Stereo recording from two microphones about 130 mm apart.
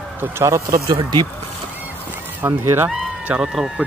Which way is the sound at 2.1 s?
15° right (ahead or behind).